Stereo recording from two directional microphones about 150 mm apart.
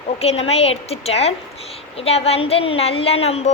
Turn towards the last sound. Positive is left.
turn(degrees=45)  # may be behind; listen again after turning